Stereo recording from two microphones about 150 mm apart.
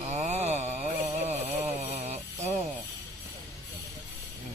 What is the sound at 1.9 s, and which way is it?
Music, 50° right (ahead or behind).